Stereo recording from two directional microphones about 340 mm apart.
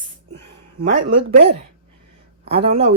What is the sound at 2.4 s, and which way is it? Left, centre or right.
Speech, centre.